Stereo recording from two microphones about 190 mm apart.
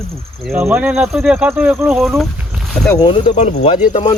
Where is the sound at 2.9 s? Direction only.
25° left (ahead or behind).